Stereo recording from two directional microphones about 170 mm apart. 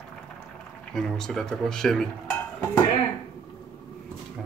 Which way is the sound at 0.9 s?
5° left (ahead or behind).